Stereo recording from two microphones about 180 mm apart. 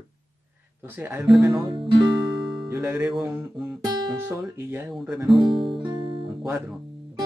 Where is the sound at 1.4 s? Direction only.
25° right (ahead or behind).